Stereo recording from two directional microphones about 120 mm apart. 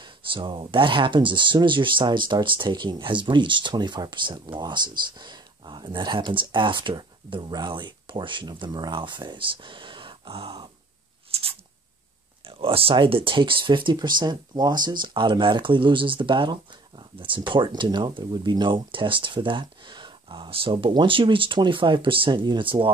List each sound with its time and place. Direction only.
0.0 s speech: 40° right (ahead or behind)
12.4 s speech: 50° right (ahead or behind)